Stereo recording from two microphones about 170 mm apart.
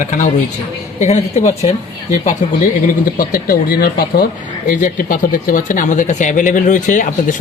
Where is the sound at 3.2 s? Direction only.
60° left (ahead or behind).